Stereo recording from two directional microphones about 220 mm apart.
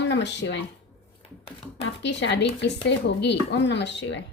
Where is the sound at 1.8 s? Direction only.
50° left (ahead or behind).